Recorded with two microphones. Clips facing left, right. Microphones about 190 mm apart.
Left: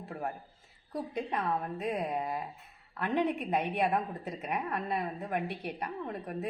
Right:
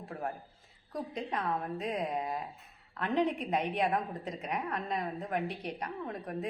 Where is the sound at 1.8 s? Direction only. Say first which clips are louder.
Left 1 dB; 5° left (ahead or behind).